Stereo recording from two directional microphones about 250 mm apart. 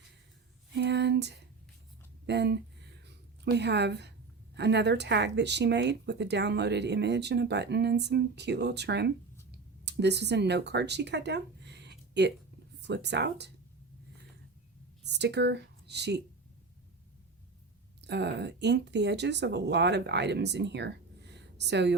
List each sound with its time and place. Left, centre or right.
0.7 s a sound: right
2.2 s speech: right
15.0 s speech: right
18.0 s speech: right